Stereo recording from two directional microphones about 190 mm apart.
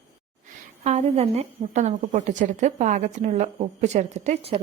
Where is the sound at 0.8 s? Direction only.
35° right (ahead or behind).